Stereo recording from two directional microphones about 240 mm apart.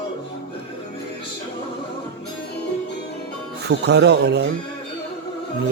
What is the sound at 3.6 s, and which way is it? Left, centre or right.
Speech, right.